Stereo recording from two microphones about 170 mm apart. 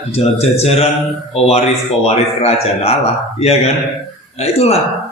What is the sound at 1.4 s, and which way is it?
Speech, 40° left (ahead or behind).